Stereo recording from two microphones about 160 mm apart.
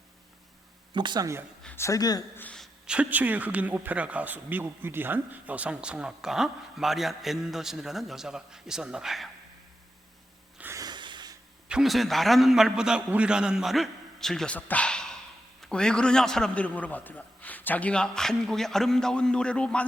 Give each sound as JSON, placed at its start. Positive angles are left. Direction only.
{"t": 0.9, "sound": "speech", "side_deg": -25}
{"t": 1.6, "sound": "speech", "side_deg": 15}
{"t": 2.4, "sound": "a woman's voice", "side_deg": 5}
{"t": 2.8, "sound": "speech", "side_deg": -5}
{"t": 10.6, "sound": "a sound", "side_deg": -20}
{"t": 11.7, "sound": "speech", "side_deg": 0}